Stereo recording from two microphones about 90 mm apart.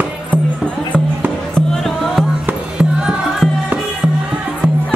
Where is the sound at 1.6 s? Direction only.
Centre (ahead or behind).